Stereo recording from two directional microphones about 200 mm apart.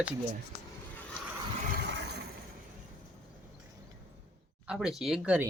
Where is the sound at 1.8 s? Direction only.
55° right (ahead or behind).